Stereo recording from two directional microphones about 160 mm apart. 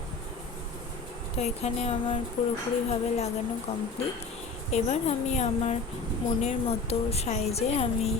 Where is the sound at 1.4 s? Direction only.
45° left (ahead or behind).